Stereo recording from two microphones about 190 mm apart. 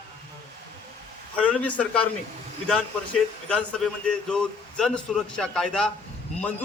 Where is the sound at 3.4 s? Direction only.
5° left (ahead or behind).